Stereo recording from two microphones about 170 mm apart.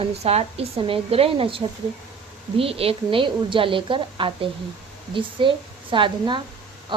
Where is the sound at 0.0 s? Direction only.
35° right (ahead or behind).